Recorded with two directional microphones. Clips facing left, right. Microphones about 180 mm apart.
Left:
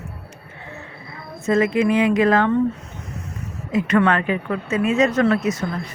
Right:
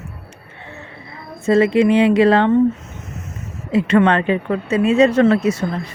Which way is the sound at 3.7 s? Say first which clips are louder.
Right 4 dB; 30° right (ahead or behind).